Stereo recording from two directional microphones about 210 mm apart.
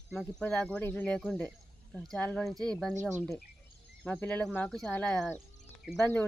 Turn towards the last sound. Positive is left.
turn(degrees=10)  # may be behind; listen again after turning